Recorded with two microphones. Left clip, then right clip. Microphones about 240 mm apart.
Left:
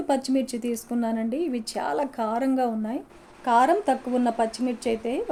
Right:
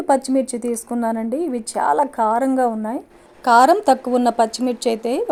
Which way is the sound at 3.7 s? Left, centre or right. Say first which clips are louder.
Right 8 dB; right.